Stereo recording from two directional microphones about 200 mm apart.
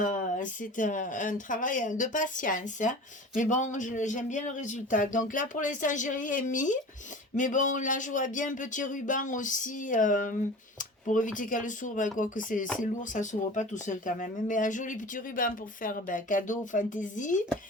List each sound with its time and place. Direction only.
0.0 s speech: 40° left (ahead or behind)